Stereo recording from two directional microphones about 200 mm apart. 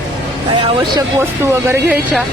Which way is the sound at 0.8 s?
15° right (ahead or behind).